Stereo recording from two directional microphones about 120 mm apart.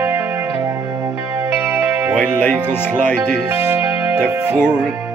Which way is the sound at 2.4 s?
15° left (ahead or behind).